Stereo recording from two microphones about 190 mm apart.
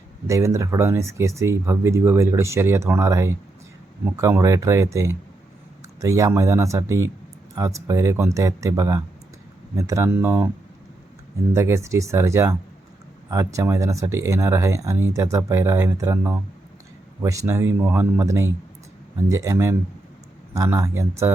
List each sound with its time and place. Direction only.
0.3 s speech: 15° right (ahead or behind)
11.5 s speech: 15° right (ahead or behind)